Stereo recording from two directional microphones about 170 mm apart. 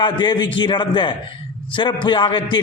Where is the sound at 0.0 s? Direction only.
25° left (ahead or behind).